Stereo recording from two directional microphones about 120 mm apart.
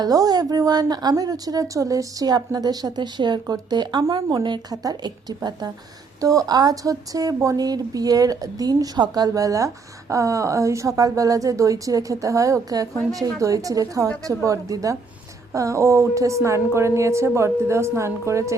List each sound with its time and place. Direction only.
0.0 s a woman's voice: 30° right (ahead or behind)